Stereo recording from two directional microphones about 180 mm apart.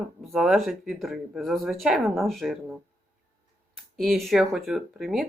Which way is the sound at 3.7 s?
Centre (ahead or behind).